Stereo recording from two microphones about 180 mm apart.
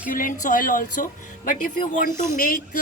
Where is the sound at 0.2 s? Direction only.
45° left (ahead or behind).